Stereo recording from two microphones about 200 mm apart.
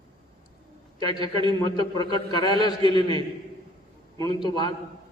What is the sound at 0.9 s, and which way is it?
A man's voice, 20° left (ahead or behind).